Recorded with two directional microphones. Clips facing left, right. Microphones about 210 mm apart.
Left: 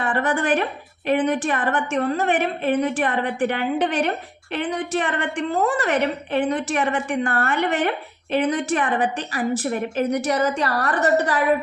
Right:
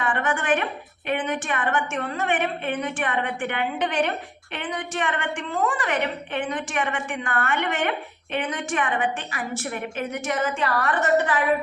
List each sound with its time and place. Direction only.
0.0 s a woman's voice: 35° left (ahead or behind)